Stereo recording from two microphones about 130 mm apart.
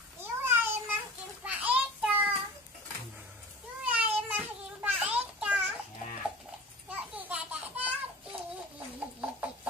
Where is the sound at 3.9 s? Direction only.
10° right (ahead or behind).